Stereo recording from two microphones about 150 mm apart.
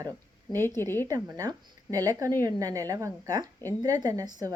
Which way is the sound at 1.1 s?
25° right (ahead or behind).